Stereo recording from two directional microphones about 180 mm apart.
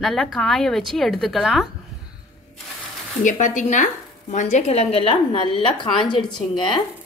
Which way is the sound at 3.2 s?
45° left (ahead or behind).